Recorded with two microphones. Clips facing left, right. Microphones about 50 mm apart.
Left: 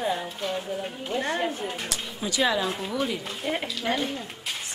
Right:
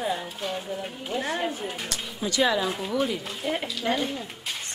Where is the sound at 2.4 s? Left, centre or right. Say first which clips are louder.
Right 1 dB; centre.